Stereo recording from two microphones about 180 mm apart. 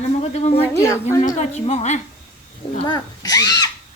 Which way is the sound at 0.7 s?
15° left (ahead or behind).